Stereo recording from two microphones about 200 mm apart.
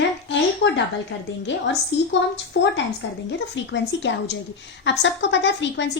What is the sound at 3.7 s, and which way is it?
A woman's voice, 65° left (ahead or behind).